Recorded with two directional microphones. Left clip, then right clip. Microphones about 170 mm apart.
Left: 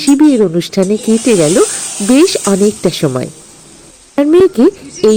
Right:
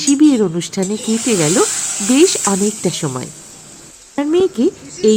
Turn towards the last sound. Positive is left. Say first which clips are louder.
# left 4 dB
turn(degrees=25)  # may be behind; listen again after turning